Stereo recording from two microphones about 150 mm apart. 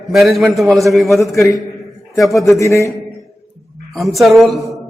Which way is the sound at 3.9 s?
Centre (ahead or behind).